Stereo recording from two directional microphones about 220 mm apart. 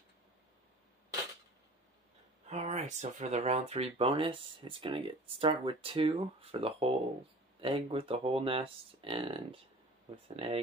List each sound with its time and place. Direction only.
2.4 s speech: 30° right (ahead or behind)